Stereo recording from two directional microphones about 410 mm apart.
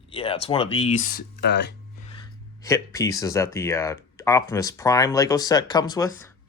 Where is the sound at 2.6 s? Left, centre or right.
Centre.